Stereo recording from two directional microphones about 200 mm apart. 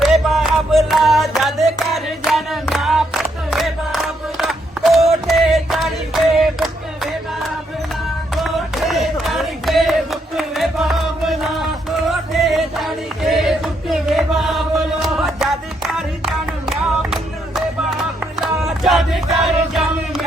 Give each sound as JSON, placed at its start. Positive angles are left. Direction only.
{"t": 0.0, "sound": "music", "side_deg": 0}
{"t": 3.5, "sound": "chant", "side_deg": 0}
{"t": 8.4, "sound": "a sound", "side_deg": 0}
{"t": 11.9, "sound": "music", "side_deg": 0}
{"t": 18.3, "sound": "battle cry", "side_deg": 0}